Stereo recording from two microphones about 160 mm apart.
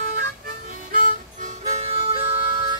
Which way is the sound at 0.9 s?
60° right (ahead or behind).